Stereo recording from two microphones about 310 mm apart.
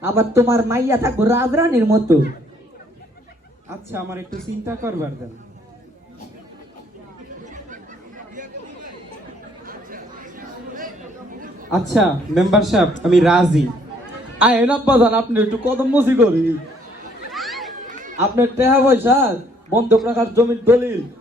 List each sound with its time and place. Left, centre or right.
0.0 s speech: centre
3.7 s speech: centre
7.4 s chatter: right
9.6 s chatter: right
11.7 s a man's voice: centre
17.3 s children playing: centre
17.8 s chatter: right
18.3 s speech: centre